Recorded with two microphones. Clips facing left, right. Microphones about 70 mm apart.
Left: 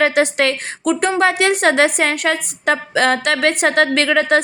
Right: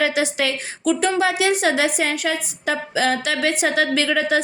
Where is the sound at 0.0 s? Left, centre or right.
Left.